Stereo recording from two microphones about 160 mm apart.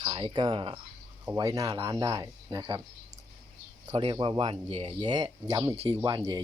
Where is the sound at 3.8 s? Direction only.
30° right (ahead or behind).